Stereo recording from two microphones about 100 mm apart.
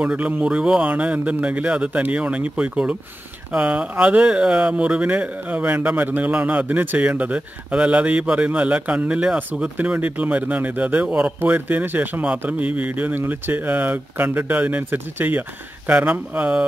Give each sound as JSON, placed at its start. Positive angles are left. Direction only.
{"t": 0.0, "sound": "speech", "side_deg": -15}